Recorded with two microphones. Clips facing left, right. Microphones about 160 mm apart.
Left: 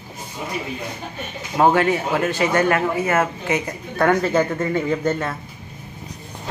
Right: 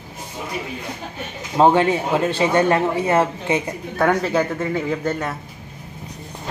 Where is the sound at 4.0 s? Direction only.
Centre (ahead or behind).